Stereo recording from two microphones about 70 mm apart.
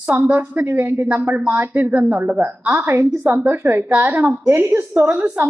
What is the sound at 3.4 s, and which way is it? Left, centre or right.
A woman's voice, centre.